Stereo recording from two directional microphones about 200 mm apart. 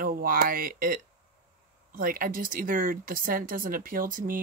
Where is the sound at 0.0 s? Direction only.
45° right (ahead or behind).